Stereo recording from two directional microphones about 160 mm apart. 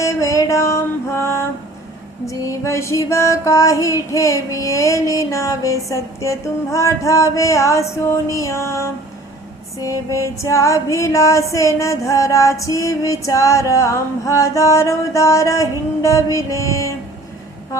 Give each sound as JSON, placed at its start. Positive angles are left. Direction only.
{"t": 0.0, "sound": "music", "side_deg": 20}
{"t": 2.2, "sound": "female singing", "side_deg": 20}